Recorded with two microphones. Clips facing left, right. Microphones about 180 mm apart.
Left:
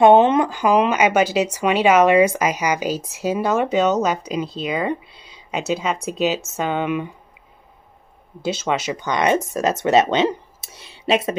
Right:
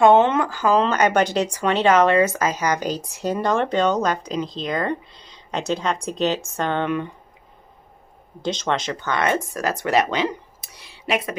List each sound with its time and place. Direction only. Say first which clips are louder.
0.0 s speech: left 2 dB; 15° left (ahead or behind)
8.4 s speech: left 1 dB; 5° left (ahead or behind); by 11.3 s 25° left (ahead or behind)